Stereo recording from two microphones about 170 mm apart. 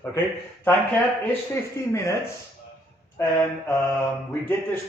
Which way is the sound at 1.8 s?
15° left (ahead or behind).